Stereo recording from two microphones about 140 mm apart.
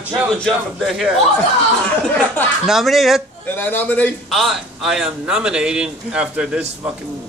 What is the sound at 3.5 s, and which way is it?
Speech, 15° left (ahead or behind).